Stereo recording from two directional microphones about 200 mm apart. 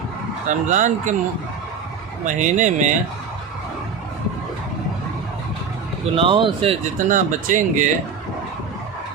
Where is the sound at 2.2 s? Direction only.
40° right (ahead or behind).